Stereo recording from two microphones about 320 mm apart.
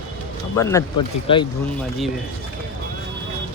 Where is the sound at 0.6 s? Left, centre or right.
Centre.